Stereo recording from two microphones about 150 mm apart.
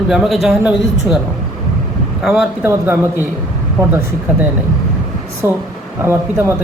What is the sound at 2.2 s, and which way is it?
A man's voice, 5° right (ahead or behind).